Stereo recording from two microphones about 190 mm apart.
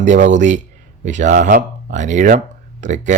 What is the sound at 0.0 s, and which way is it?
Speech, 40° right (ahead or behind).